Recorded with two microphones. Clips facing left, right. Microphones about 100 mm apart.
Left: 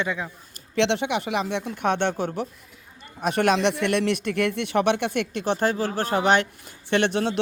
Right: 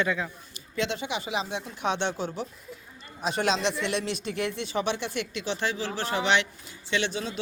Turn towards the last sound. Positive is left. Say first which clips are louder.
# left 7 dB
turn(degrees=65)  # may be behind; listen again after turning